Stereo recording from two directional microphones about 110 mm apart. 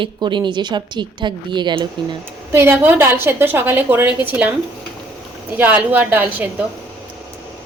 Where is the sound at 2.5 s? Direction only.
20° right (ahead or behind).